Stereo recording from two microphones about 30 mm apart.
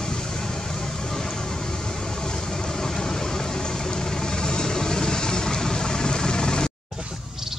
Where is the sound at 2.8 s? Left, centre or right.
Centre.